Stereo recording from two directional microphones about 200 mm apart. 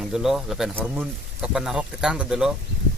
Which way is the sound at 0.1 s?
Centre (ahead or behind).